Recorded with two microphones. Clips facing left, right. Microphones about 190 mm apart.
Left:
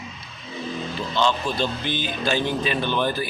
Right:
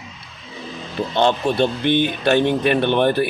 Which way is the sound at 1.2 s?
60° right (ahead or behind).